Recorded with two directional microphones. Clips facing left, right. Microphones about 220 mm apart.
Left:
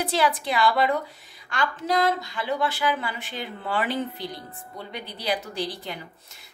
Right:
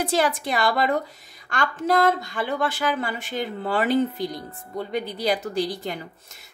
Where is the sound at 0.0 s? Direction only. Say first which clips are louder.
Right 2 dB; 45° right (ahead or behind).